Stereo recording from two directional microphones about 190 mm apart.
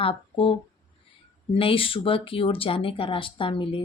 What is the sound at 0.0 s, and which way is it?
Speech, 30° left (ahead or behind).